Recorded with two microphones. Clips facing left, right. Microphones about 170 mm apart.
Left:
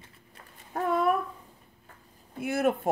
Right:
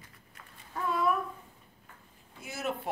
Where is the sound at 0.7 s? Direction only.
60° left (ahead or behind).